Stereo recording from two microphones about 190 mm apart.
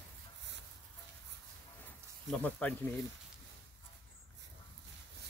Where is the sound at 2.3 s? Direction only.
5° left (ahead or behind).